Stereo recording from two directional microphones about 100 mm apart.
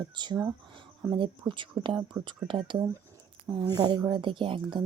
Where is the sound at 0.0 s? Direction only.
45° right (ahead or behind).